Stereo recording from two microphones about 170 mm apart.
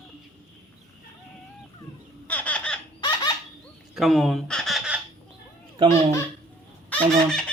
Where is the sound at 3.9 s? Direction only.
Centre (ahead or behind).